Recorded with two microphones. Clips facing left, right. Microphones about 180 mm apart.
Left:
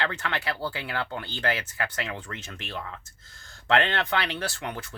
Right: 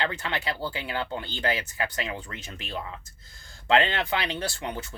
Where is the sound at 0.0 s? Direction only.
15° right (ahead or behind).